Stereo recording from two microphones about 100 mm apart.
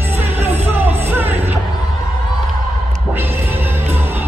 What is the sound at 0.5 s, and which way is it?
Music, 20° right (ahead or behind).